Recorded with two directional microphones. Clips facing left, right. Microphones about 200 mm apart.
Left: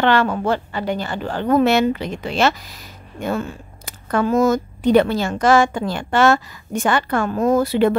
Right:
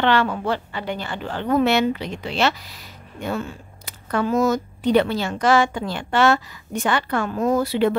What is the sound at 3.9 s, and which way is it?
A woman's voice, 50° left (ahead or behind).